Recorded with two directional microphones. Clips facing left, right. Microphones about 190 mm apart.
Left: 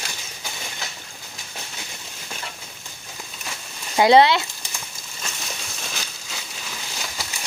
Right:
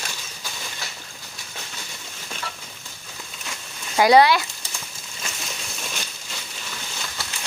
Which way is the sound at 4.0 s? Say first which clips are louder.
Left 1 dB; 25° left (ahead or behind).